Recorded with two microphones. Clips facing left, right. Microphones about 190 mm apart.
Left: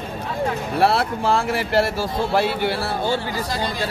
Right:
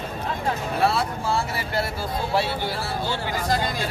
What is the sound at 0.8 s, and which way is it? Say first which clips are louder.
Speech: left 6 dB; 65° left (ahead or behind).